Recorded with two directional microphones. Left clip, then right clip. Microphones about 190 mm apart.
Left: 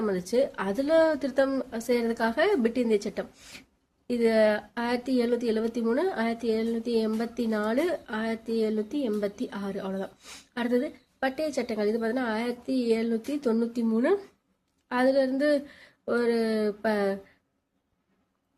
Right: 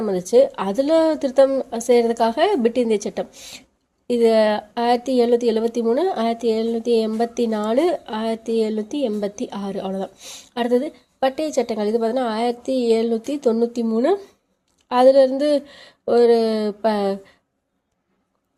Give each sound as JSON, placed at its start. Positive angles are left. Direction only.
{"t": 0.0, "sound": "speech", "side_deg": -25}